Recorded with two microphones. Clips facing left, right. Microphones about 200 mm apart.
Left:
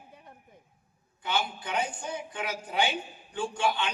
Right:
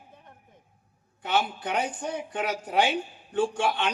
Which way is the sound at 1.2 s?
70° right (ahead or behind).